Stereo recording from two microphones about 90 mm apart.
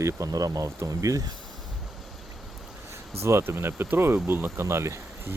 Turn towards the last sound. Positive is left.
turn(degrees=-30)  # may be behind; listen again after turning